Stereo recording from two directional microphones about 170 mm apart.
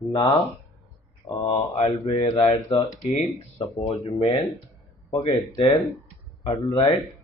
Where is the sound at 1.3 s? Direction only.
30° left (ahead or behind).